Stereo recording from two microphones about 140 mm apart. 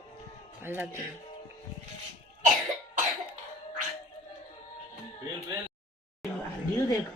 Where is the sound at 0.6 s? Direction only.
15° right (ahead or behind).